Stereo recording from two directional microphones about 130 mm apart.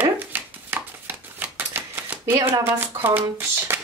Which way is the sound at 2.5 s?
15° right (ahead or behind).